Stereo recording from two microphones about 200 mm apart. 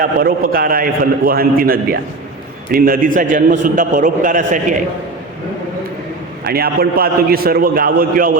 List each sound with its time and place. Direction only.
0.0 s a man's voice: 45° right (ahead or behind)
6.4 s a man's voice: 50° right (ahead or behind)